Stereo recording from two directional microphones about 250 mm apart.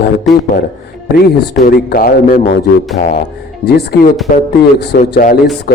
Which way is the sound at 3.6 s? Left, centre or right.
Left.